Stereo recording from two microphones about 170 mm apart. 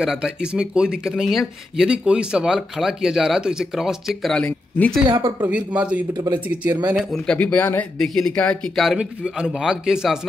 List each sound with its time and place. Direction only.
0.0 s speech: 5° right (ahead or behind)
5.0 s speech: 30° right (ahead or behind)
5.8 s a man's voice: 5° right (ahead or behind)
6.1 s speech: 25° right (ahead or behind)
6.9 s speech: centre (ahead or behind)